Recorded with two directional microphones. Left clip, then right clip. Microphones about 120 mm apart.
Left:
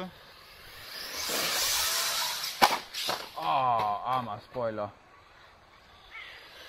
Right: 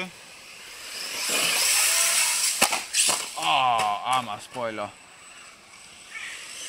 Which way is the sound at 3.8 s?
85° left.